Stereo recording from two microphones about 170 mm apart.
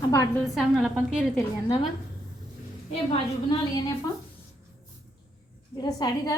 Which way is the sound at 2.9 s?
35° left (ahead or behind).